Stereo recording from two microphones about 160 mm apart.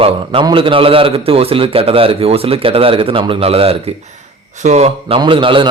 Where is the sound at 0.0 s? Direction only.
35° right (ahead or behind).